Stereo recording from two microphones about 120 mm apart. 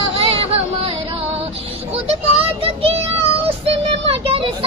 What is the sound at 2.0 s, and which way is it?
Child singing, 55° right (ahead or behind).